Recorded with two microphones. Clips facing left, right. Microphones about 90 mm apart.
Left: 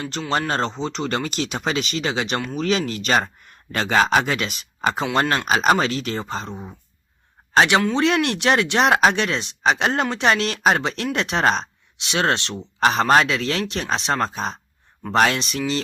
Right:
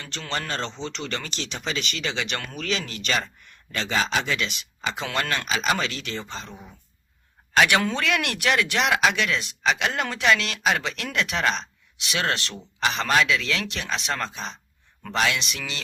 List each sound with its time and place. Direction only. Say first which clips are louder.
0.3 s a man's voice: left 7 dB; 40° left (ahead or behind)